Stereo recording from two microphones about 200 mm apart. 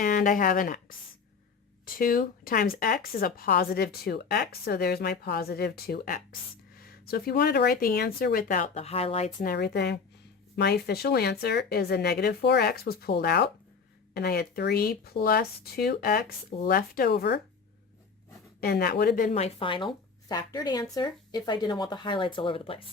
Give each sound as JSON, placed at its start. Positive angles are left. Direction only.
{"t": 0.0, "sound": "speech", "side_deg": 45}
{"t": 9.4, "sound": "speech", "side_deg": 50}
{"t": 18.6, "sound": "speech", "side_deg": 50}
{"t": 19.3, "sound": "speech", "side_deg": 30}